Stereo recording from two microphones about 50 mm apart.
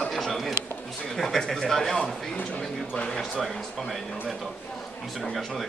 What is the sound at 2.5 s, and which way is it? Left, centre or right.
Speech, centre.